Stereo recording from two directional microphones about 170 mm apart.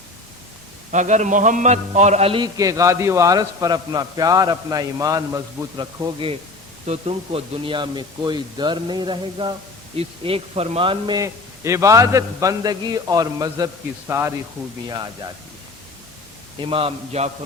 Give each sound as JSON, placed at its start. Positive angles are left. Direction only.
{"t": 0.9, "sound": "a man's voice", "side_deg": -45}
{"t": 2.6, "sound": "a man's voice", "side_deg": -20}
{"t": 6.8, "sound": "a man's voice", "side_deg": -35}
{"t": 16.6, "sound": "a man's voice", "side_deg": -30}